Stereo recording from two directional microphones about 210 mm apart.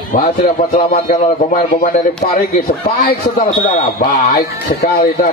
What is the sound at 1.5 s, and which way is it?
A man's voice, 40° left (ahead or behind).